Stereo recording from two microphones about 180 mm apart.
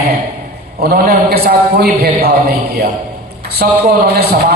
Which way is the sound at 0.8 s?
60° right (ahead or behind).